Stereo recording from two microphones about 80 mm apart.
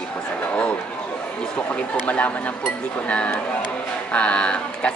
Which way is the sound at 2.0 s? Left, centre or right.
Centre.